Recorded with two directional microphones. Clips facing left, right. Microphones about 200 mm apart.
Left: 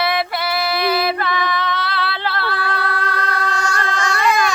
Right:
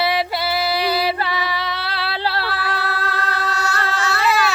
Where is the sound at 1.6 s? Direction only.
35° right (ahead or behind).